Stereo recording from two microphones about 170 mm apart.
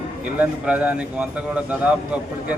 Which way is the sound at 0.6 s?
5° right (ahead or behind).